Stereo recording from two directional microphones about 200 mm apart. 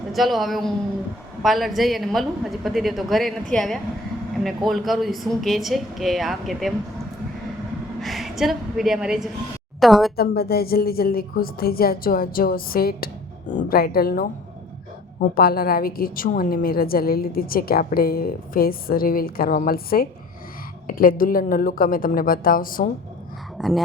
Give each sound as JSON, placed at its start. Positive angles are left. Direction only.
{"t": 0.1, "sound": "a woman's voice", "side_deg": 0}
{"t": 8.0, "sound": "a woman's voice", "side_deg": 0}
{"t": 10.2, "sound": "a woman's voice", "side_deg": 50}
{"t": 23.6, "sound": "a woman's voice", "side_deg": 0}